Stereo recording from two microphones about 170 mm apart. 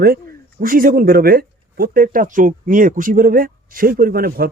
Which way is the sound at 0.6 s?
55° right (ahead or behind).